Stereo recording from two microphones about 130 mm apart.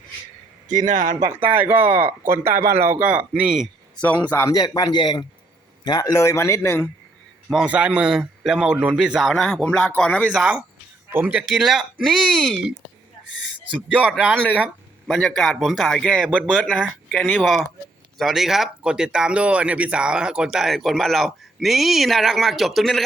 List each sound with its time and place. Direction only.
0.7 s speech: 75° right (ahead or behind)
1.5 s speech: 15° right (ahead or behind)
4.0 s a man's voice: 10° left (ahead or behind)
4.4 s a man's voice: 30° left (ahead or behind)
7.5 s speech: 5° right (ahead or behind); by 10.2 s 10° left (ahead or behind)
10.3 s speech: 5° right (ahead or behind)
14.3 s a man's voice: 10° left (ahead or behind)
17.1 s a man's voice: 10° left (ahead or behind)